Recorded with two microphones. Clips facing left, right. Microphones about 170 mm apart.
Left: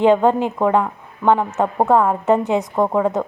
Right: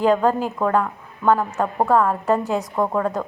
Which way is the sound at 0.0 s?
25° left (ahead or behind).